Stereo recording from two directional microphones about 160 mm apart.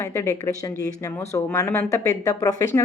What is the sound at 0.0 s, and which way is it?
Speech, 15° left (ahead or behind).